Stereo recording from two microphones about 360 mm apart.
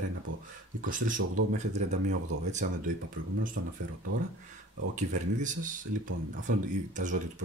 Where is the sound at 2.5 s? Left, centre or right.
Right.